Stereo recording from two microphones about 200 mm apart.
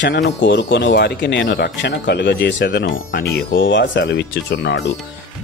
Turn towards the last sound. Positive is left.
turn(degrees=60)  # may be behind; listen again after turning